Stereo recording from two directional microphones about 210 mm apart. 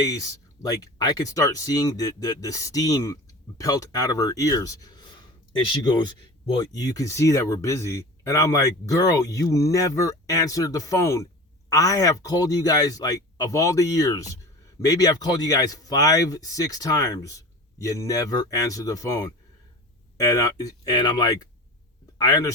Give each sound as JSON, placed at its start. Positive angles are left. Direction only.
{"t": 0.0, "sound": "speech", "side_deg": 15}